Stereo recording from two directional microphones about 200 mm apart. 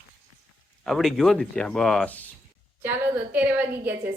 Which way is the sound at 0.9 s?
Centre (ahead or behind).